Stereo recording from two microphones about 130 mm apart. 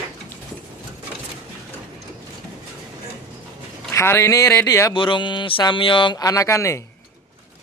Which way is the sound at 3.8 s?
20° left (ahead or behind).